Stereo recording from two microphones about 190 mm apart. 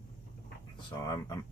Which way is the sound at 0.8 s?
20° left (ahead or behind).